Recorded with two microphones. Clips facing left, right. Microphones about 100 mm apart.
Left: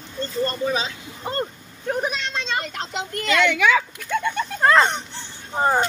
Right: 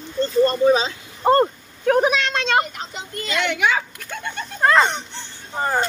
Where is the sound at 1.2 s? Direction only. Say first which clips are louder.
Right 12 dB; 65° right (ahead or behind).